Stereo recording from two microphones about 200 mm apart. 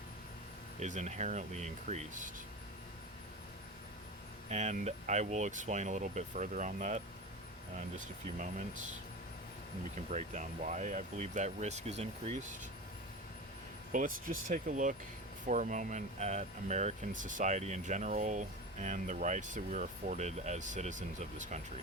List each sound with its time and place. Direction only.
0.8 s speech: 35° right (ahead or behind)
4.4 s speech: 35° right (ahead or behind)
10.1 s speech: 35° right (ahead or behind)
13.9 s speech: 40° right (ahead or behind)